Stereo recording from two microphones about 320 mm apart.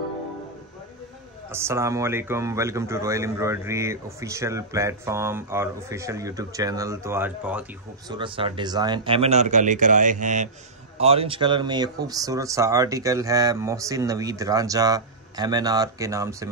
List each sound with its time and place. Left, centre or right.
1.5 s a man's voice: centre
8.1 s a man's voice: centre